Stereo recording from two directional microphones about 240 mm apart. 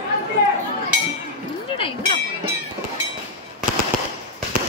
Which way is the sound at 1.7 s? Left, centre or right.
Left.